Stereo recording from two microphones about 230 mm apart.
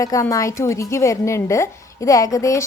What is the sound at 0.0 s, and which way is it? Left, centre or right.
A woman's voice, centre.